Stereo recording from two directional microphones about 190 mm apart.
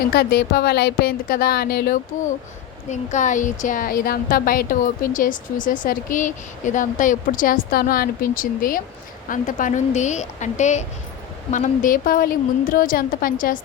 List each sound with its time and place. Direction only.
0.1 s a woman's voice: 55° left (ahead or behind)